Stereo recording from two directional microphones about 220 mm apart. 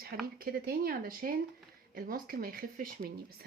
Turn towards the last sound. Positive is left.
turn(degrees=-45)  # may be behind; listen again after turning